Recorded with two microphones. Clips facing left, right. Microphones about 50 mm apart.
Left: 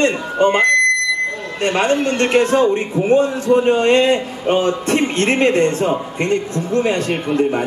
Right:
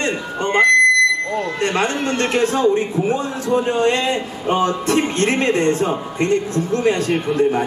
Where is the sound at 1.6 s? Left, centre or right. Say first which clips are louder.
Left 6 dB; left.